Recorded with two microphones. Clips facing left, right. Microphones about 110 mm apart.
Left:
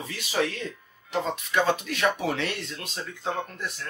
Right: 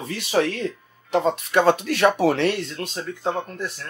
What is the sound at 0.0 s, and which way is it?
Speech, 55° right (ahead or behind).